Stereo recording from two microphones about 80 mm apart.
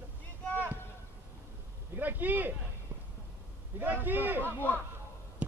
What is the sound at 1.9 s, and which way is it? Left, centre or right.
Speech, right.